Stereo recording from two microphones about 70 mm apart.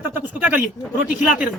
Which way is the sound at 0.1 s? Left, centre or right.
Right.